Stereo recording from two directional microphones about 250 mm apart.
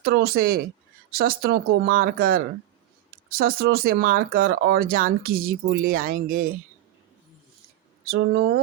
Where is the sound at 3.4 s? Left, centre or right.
Right.